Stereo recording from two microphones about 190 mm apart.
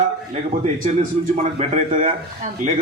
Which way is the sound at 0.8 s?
40° right (ahead or behind).